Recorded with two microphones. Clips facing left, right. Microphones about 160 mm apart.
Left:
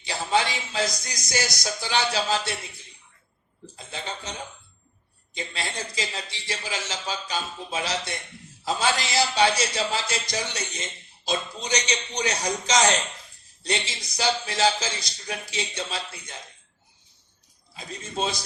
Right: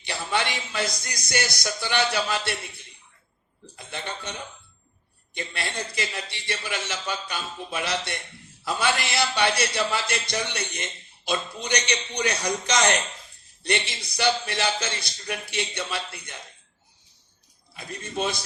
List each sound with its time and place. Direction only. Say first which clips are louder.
0.0 s a man's voice: left 3 dB; 65° right (ahead or behind)
3.8 s a man's voice: right 1 dB; 60° right (ahead or behind)
17.7 s a man's voice: even; 60° right (ahead or behind)